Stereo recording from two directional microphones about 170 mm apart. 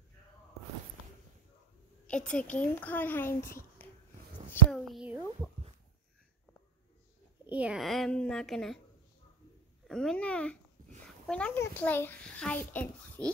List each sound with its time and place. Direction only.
2.0 s a child's voice: 5° left (ahead or behind)
4.5 s a sound: 5° left (ahead or behind)
7.4 s a woman's voice: 5° right (ahead or behind)
9.8 s a child's voice: 5° left (ahead or behind)